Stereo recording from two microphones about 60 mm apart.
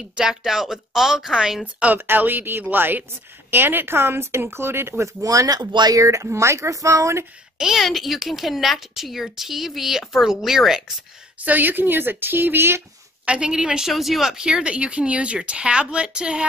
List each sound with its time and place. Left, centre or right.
0.1 s a woman's voice: centre
2.0 s speech: right
5.2 s speech: right
7.5 s a woman's voice: centre
11.4 s speech: right
13.2 s a woman's voice: centre
13.8 s a woman's voice: centre
14.4 s a woman's voice: centre